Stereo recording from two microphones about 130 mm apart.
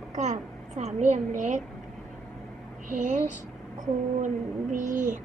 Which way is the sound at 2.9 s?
70° right (ahead or behind).